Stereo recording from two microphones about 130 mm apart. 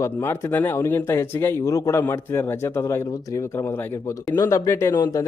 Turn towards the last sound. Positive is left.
turn(degrees=30)  # may be behind; listen again after turning